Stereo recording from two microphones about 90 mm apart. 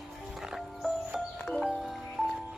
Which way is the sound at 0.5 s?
5° right (ahead or behind).